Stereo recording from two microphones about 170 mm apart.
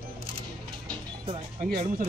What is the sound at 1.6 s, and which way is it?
Speech, 55° right (ahead or behind).